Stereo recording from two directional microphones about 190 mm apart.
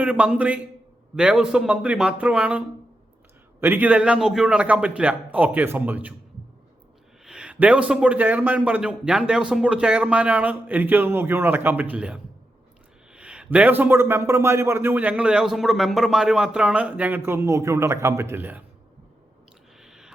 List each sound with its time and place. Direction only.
0.0 s a man's voice: 5° right (ahead or behind)
7.3 s a man's voice: 5° right (ahead or behind)
19.8 s a sound: 5° right (ahead or behind)